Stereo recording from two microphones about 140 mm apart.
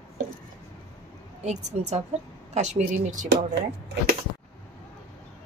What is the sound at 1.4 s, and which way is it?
A woman's voice, 55° right (ahead or behind).